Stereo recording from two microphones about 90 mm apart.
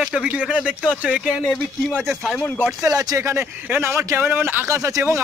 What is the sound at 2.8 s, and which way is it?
Speech, 45° right (ahead or behind).